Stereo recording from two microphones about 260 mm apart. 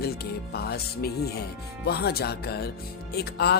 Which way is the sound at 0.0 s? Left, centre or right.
Left.